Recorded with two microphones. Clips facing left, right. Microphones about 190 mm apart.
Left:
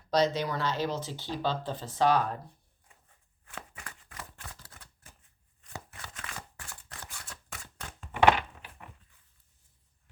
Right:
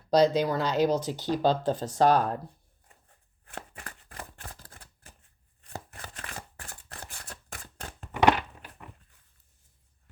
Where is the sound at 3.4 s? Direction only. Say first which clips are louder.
Right 3 dB; 35° right (ahead or behind).